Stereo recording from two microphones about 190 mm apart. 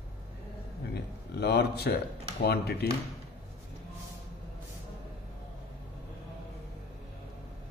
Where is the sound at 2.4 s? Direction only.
55° left (ahead or behind).